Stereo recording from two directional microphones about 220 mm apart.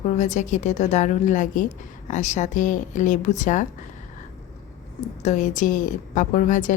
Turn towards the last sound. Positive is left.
turn(degrees=35)  # may be behind; listen again after turning